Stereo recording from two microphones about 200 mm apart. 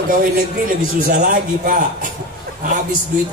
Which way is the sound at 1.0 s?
40° right (ahead or behind).